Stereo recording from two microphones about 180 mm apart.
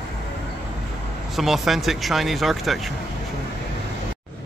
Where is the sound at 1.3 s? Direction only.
Centre (ahead or behind).